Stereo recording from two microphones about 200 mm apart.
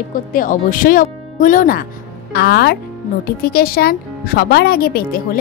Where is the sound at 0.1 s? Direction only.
45° left (ahead or behind).